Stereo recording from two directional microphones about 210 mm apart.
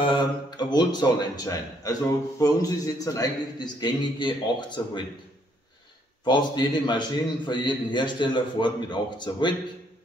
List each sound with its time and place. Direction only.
0.0 s speech: 20° left (ahead or behind)
6.2 s speech: 20° left (ahead or behind)